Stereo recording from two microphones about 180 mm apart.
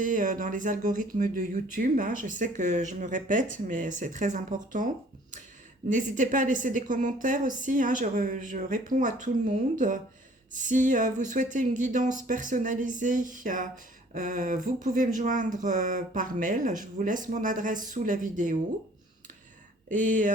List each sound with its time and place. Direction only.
0.0 s speech: 45° right (ahead or behind)
5.9 s speech: 45° right (ahead or behind)
19.9 s speech: 45° right (ahead or behind)